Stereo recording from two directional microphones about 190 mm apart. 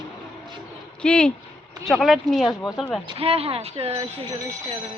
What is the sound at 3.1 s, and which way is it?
Speech, 30° right (ahead or behind).